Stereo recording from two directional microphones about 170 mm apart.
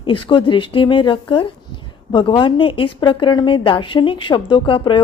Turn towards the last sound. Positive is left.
turn(degrees=30)  # may be behind; listen again after turning